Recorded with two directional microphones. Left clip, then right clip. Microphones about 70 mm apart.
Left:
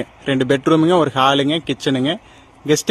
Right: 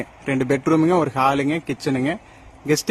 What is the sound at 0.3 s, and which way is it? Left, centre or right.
Speech, left.